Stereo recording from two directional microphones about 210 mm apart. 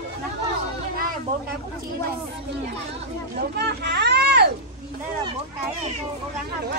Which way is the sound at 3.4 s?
50° right (ahead or behind).